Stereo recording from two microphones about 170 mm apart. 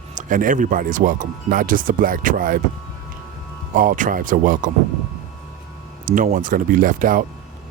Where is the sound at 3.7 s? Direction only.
50° right (ahead or behind).